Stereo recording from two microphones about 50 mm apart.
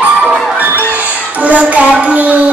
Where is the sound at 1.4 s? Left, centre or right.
Right.